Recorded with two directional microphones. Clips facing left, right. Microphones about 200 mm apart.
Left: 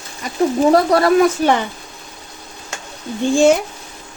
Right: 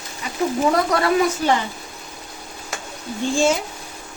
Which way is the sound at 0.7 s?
35° left (ahead or behind).